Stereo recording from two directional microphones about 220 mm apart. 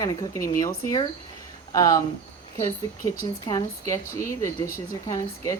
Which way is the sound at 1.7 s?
15° left (ahead or behind).